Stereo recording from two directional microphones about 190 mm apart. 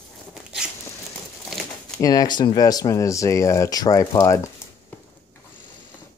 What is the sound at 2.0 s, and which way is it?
Speech, 20° left (ahead or behind).